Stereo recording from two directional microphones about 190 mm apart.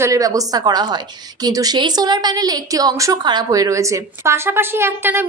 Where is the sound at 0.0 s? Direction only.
15° right (ahead or behind).